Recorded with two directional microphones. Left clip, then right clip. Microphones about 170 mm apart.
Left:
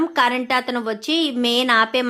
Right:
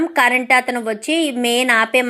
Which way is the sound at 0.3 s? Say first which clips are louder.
Right 6 dB; 5° left (ahead or behind).